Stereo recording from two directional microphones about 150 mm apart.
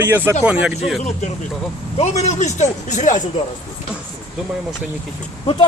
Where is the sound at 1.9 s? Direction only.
45° left (ahead or behind).